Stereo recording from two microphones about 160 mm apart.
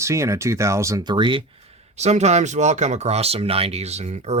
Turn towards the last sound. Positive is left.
turn(degrees=-45)  # may be behind; listen again after turning